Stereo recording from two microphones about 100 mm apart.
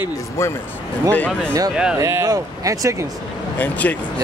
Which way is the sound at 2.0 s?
30° right (ahead or behind).